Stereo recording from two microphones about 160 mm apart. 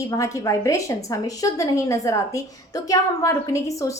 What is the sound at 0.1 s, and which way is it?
A woman's voice, 20° left (ahead or behind).